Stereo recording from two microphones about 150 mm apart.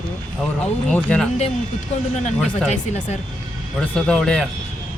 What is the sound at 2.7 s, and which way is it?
Speech, 50° left (ahead or behind).